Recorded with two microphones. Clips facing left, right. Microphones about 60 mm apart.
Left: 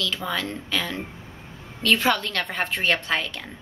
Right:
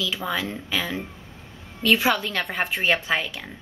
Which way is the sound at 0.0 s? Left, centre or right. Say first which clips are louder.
Right 1 dB; centre.